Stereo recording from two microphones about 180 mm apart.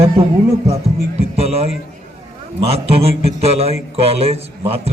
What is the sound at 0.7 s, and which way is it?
Speech, 35° right (ahead or behind).